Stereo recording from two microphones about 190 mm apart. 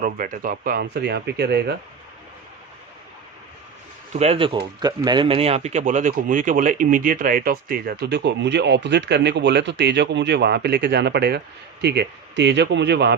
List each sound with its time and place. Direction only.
0.0 s speech: 45° right (ahead or behind)
4.1 s speech: 30° right (ahead or behind); by 13.1 s 60° right (ahead or behind)